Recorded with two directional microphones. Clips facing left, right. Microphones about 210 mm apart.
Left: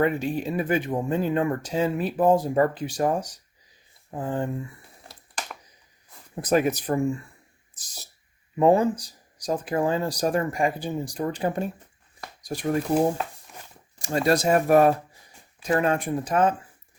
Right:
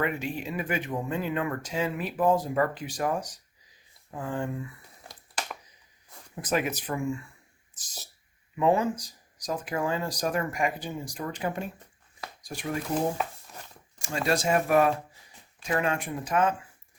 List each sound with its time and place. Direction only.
0.0 s speech: 35° left (ahead or behind)
5.0 s a sound: 5° right (ahead or behind)
6.3 s speech: 40° left (ahead or behind)
8.5 s speech: 35° left (ahead or behind)
14.0 s speech: 40° left (ahead or behind)